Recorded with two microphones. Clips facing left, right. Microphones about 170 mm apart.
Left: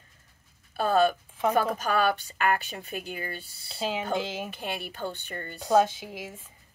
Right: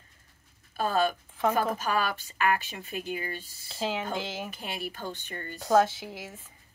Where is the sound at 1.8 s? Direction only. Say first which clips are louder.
Left 4 dB; 45° left (ahead or behind).